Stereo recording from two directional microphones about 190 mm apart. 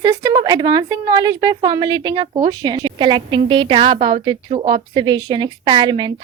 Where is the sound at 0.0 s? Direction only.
20° right (ahead or behind).